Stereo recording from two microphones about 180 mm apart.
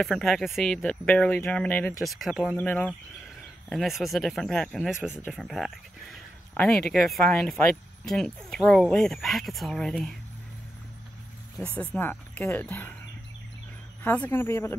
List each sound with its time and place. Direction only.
0.0 s speech: centre (ahead or behind)
11.7 s speech: 10° left (ahead or behind)
14.0 s speech: 10° left (ahead or behind)